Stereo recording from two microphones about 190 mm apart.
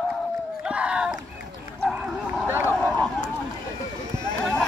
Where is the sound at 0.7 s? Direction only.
5° right (ahead or behind).